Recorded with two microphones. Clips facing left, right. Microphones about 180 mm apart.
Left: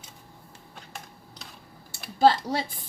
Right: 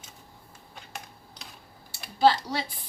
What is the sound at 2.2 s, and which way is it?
Speech, 50° left (ahead or behind).